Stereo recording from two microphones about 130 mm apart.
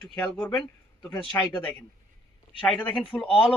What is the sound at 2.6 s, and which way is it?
Speech, 10° left (ahead or behind).